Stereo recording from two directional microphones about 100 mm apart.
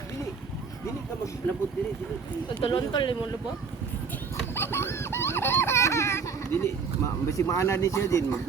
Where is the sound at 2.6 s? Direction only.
55° left (ahead or behind).